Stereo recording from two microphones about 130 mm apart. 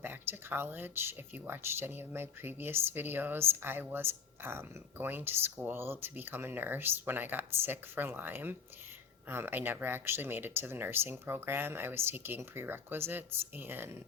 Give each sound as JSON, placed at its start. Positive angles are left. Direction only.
{"t": 0.0, "sound": "speech", "side_deg": -15}